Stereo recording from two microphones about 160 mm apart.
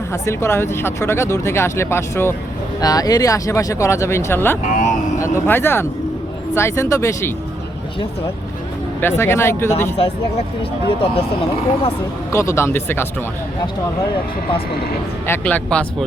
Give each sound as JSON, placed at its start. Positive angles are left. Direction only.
{"t": 0.1, "sound": "speech", "side_deg": 15}
{"t": 4.6, "sound": "speech", "side_deg": 50}
{"t": 5.1, "sound": "speech", "side_deg": 20}
{"t": 9.0, "sound": "speech", "side_deg": 15}
{"t": 10.0, "sound": "speech", "side_deg": 35}
{"t": 12.3, "sound": "speech", "side_deg": 15}
{"t": 15.3, "sound": "speech", "side_deg": 10}